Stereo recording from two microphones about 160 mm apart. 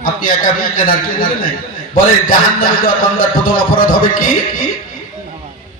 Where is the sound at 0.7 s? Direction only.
60° left (ahead or behind).